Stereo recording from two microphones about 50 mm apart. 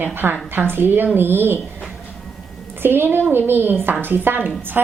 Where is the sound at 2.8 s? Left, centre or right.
Right.